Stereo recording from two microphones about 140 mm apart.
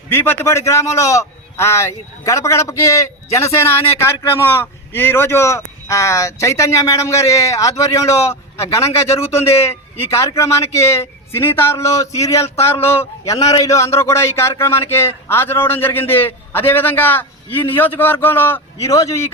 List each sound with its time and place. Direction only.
0.1 s a man's voice: 15° left (ahead or behind)